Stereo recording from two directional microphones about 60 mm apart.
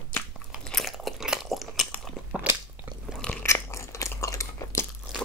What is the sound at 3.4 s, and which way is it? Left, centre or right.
Chewing, left.